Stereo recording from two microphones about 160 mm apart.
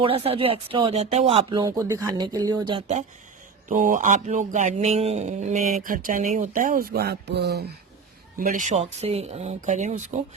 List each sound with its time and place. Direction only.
0.0 s speech: 35° right (ahead or behind)
3.7 s speech: 55° right (ahead or behind); by 7.8 s 90° right
8.4 s speech: 55° right (ahead or behind)